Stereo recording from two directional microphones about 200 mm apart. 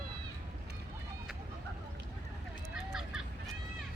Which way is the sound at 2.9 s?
Centre (ahead or behind).